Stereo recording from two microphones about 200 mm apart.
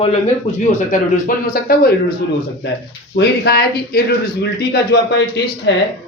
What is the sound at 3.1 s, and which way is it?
Speech, 55° left (ahead or behind).